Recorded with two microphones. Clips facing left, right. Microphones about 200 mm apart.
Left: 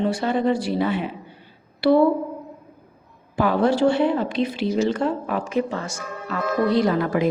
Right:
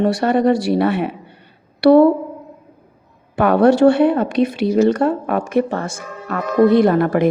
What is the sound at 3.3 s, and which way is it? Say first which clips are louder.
Speech: right 7 dB; 65° right (ahead or behind).